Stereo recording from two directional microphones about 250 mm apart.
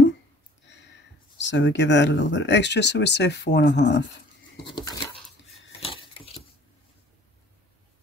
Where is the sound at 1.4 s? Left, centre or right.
Left.